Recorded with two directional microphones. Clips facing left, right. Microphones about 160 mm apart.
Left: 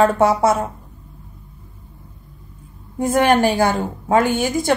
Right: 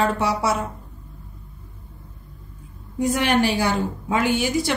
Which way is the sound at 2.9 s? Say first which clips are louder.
Left 4 dB; 50° left (ahead or behind).